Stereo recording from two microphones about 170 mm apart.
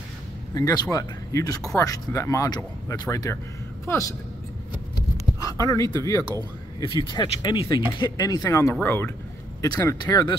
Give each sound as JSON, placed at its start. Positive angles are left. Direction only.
{"t": 0.6, "sound": "speech", "side_deg": 20}
{"t": 5.1, "sound": "a sound", "side_deg": 20}
{"t": 6.9, "sound": "speech", "side_deg": 25}